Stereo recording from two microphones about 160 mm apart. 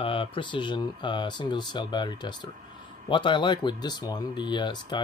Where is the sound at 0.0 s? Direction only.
35° left (ahead or behind).